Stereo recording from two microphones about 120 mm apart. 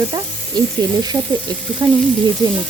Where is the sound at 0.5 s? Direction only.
35° right (ahead or behind).